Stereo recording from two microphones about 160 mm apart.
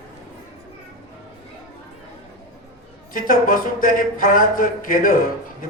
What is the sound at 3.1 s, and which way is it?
Speech, 60° left (ahead or behind).